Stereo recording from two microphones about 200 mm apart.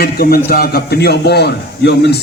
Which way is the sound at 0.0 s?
50° left (ahead or behind).